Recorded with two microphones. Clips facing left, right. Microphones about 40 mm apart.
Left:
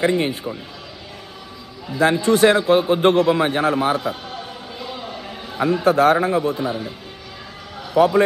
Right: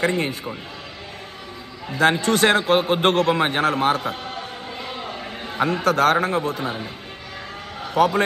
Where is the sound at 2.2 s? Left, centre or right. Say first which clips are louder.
Left 3 dB; right.